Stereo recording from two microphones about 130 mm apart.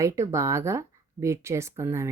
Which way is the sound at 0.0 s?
20° right (ahead or behind).